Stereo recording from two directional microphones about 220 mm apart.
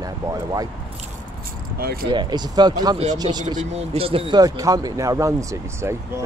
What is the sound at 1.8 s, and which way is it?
Speech, 45° right (ahead or behind).